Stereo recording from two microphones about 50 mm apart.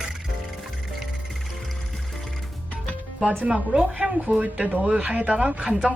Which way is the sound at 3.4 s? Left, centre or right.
Right.